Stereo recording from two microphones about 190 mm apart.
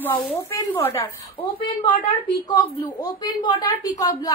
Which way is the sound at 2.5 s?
20° left (ahead or behind).